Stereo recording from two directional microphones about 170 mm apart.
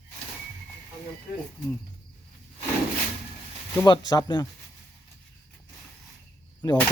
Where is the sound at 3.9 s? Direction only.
25° left (ahead or behind).